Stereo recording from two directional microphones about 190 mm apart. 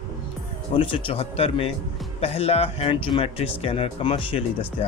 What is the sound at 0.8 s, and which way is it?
Speech, 30° left (ahead or behind).